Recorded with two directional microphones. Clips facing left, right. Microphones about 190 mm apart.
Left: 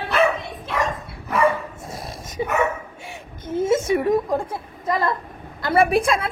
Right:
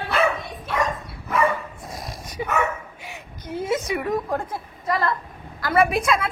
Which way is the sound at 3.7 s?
25° left (ahead or behind).